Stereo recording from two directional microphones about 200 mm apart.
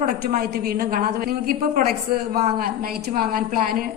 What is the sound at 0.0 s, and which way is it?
A woman's voice, 50° right (ahead or behind).